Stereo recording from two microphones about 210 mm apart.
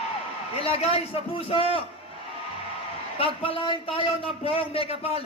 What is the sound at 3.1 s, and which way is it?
A man's voice, 25° left (ahead or behind).